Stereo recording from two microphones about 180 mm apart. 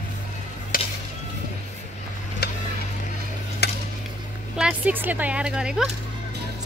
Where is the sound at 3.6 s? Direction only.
65° left (ahead or behind).